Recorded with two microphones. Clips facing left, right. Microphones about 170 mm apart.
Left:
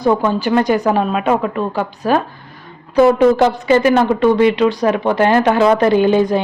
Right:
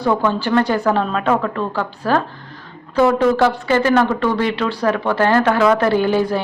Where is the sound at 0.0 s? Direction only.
15° left (ahead or behind).